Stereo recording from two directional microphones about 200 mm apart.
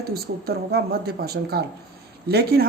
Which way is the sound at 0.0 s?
50° right (ahead or behind).